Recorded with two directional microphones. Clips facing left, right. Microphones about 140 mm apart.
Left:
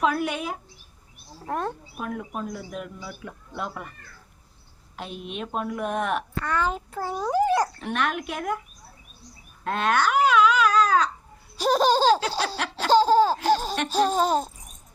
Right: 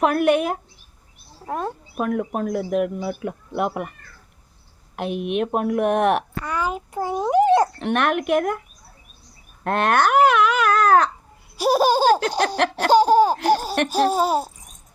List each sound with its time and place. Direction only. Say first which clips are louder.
0.0 s a man's voice: right 7 dB; 60° right (ahead or behind)
1.5 s speech: right 2 dB; 5° right (ahead or behind)
2.0 s a man's voice: right 11 dB; 60° right (ahead or behind)
4.9 s a man's voice: right 11 dB; 60° right (ahead or behind)
6.4 s a child's voice: right 1 dB; 10° right (ahead or behind)
7.8 s a man's voice: right 6 dB; 65° right (ahead or behind)
9.6 s babbling: right 5 dB; 60° right (ahead or behind)
11.5 s laughter: right 3 dB; 10° right (ahead or behind)